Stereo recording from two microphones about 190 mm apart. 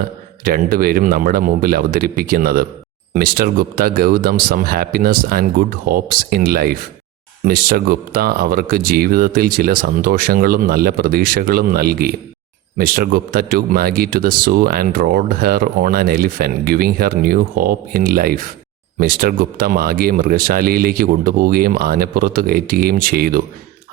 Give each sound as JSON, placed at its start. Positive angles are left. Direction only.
{"t": 0.4, "sound": "speech", "side_deg": -50}